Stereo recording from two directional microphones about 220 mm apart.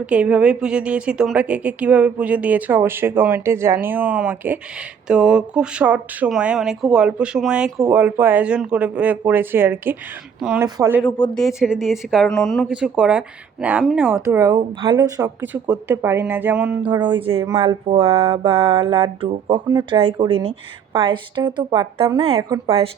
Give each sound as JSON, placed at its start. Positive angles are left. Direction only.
{"t": 0.0, "sound": "a woman's voice", "side_deg": -5}
{"t": 11.0, "sound": "speech", "side_deg": 0}
{"t": 16.8, "sound": "speech", "side_deg": -20}